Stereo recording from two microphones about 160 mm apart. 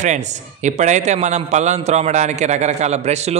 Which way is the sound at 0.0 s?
45° right (ahead or behind).